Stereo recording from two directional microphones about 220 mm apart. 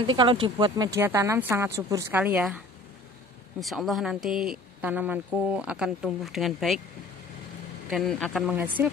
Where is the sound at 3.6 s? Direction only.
Centre (ahead or behind).